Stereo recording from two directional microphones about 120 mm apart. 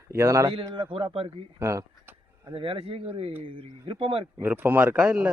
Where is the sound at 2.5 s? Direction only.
50° right (ahead or behind).